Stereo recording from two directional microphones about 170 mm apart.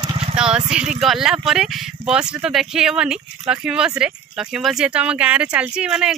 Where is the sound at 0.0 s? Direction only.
35° right (ahead or behind).